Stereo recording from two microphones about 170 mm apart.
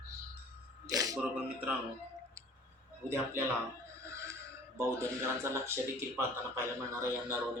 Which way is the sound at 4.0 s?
15° right (ahead or behind).